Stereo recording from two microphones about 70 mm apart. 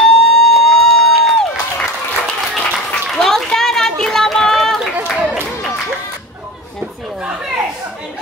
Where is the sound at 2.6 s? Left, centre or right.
Centre.